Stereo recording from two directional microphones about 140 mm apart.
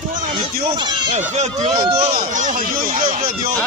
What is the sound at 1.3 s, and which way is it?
Speech, 55° right (ahead or behind).